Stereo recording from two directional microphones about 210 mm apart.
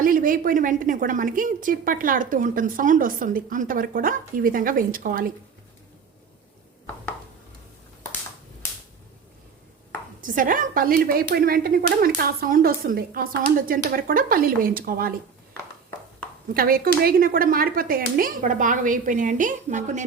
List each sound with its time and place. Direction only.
0.0 s a woman's voice: 40° right (ahead or behind)
10.2 s speech: 40° right (ahead or behind)
16.6 s a woman's voice: 45° right (ahead or behind)